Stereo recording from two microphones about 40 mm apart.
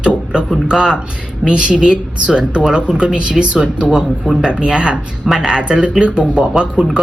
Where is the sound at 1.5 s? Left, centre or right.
Right.